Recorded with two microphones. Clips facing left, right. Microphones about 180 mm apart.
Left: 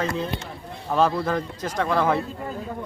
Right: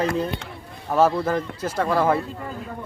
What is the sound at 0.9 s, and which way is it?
Speech, 5° right (ahead or behind).